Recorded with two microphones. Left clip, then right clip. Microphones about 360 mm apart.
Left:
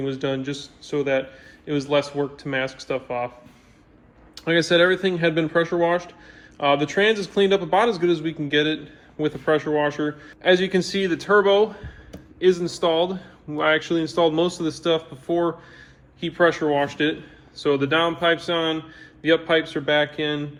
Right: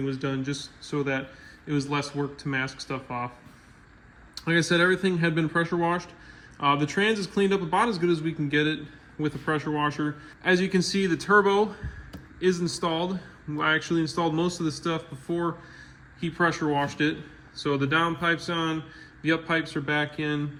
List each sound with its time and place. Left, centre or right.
0.0 s a man's voice: centre
4.4 s a man's voice: centre
7.9 s a man's voice: centre
8.4 s a man's voice: centre